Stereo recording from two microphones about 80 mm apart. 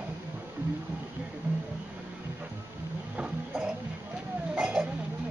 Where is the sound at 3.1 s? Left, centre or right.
Centre.